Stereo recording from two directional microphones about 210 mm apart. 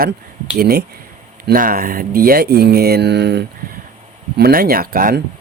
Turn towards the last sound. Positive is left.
turn(degrees=-40)  # may be behind; listen again after turning